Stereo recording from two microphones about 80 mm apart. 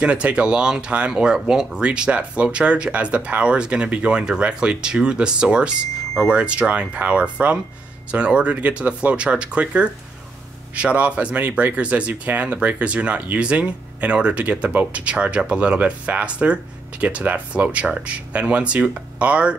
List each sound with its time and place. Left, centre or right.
0.0 s speech: centre